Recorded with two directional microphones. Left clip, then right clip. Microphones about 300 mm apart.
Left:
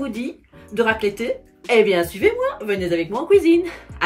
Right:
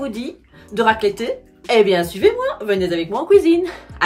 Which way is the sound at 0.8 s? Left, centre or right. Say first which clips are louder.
Right 3 dB; centre.